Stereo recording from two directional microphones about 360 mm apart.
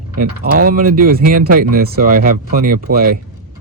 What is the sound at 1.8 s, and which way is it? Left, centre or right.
Speech, right.